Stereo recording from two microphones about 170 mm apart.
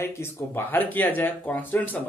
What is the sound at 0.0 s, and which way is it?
Speech, 15° left (ahead or behind).